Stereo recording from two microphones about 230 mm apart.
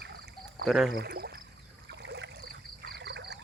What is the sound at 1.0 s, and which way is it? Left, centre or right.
Frog, right.